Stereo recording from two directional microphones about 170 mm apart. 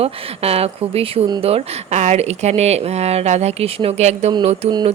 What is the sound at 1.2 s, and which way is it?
Speech, 25° right (ahead or behind).